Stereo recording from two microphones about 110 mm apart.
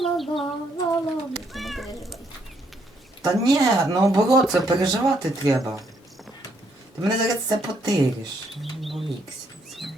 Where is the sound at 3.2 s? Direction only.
35° right (ahead or behind).